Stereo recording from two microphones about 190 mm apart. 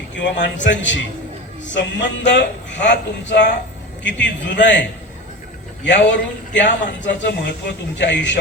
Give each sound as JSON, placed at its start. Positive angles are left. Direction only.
{"t": 0.2, "sound": "speech", "side_deg": 70}